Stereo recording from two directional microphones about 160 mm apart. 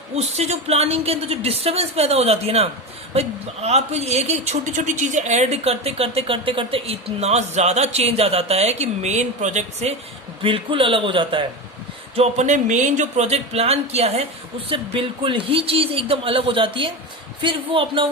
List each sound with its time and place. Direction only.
0.2 s speech: 40° right (ahead or behind)
10.4 s speech: 35° right (ahead or behind)
12.1 s speech: 40° right (ahead or behind)